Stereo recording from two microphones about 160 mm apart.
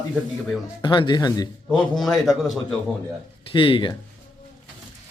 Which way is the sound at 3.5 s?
30° left (ahead or behind).